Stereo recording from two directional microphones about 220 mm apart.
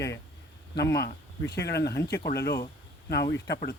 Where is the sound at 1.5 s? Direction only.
50° left (ahead or behind).